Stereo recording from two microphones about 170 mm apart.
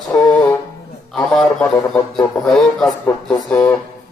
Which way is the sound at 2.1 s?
Centre (ahead or behind).